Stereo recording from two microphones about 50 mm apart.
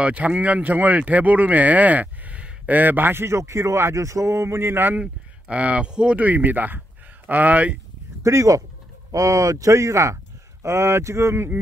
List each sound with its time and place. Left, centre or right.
0.0 s a man's voice: right
5.0 s speech: right
6.1 s speech: right
8.2 s speech: right
10.6 s speech: right